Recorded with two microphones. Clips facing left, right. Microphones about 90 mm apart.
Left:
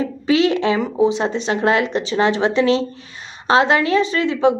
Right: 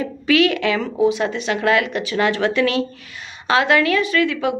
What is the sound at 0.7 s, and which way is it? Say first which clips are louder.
A woman's voice: left 1 dB; 25° left (ahead or behind).